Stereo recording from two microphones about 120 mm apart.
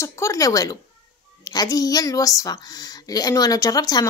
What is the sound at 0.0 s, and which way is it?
A woman's voice, 25° left (ahead or behind).